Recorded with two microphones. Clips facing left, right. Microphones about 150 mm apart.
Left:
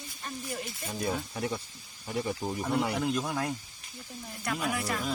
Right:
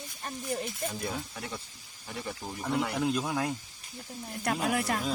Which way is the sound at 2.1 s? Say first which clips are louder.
Left 6 dB; 15° left (ahead or behind).